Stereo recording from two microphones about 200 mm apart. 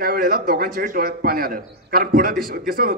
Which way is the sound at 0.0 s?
50° right (ahead or behind).